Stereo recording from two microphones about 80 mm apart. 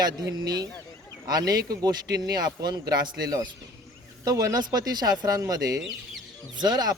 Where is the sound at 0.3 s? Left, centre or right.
Right.